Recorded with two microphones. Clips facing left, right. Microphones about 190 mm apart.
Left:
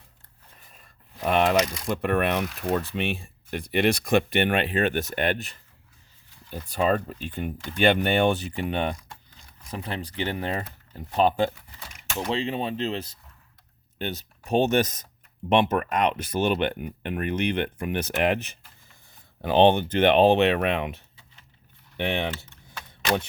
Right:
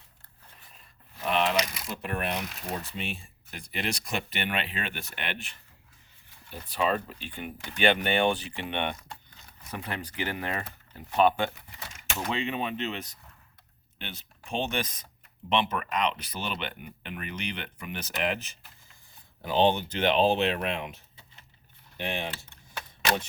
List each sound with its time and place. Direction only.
1.2 s speech: 50° left (ahead or behind)
6.7 s speech: 45° left (ahead or behind); by 22.4 s 65° left (ahead or behind)